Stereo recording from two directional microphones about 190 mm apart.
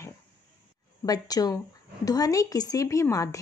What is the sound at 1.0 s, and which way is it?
A woman's voice, 20° left (ahead or behind).